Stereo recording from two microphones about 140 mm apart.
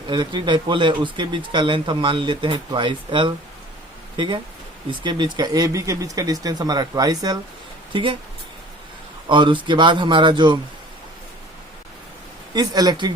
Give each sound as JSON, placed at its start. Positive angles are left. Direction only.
{"t": 0.1, "sound": "speech", "side_deg": -35}
{"t": 4.9, "sound": "speech", "side_deg": -35}
{"t": 9.3, "sound": "speech", "side_deg": -35}
{"t": 12.5, "sound": "speech", "side_deg": -30}